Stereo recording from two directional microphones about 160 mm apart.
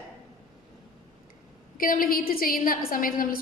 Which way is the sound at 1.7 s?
60° left (ahead or behind).